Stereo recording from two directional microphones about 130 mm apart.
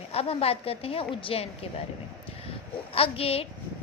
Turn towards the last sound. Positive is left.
turn(degrees=50)  # may be behind; listen again after turning